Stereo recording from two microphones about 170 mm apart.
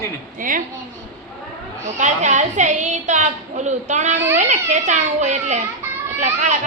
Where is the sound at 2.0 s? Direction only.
45° right (ahead or behind).